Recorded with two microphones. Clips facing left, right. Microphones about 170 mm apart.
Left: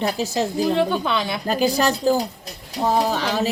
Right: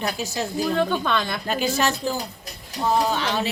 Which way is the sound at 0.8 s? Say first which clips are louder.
Left 2 dB; 10° left (ahead or behind).